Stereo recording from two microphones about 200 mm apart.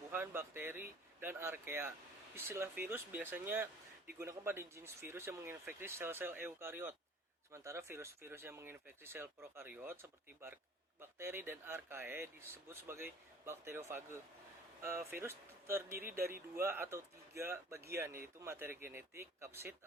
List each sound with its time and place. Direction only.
0.1 s speech: 10° right (ahead or behind)
15.9 s speech: 45° right (ahead or behind)
16.6 s speech: 10° right (ahead or behind)